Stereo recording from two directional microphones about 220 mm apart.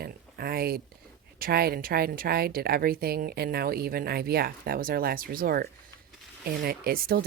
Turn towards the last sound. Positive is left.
turn(degrees=-45)  # may be behind; listen again after turning